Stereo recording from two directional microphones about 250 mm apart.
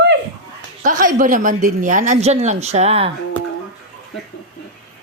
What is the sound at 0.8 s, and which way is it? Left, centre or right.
Speech, right.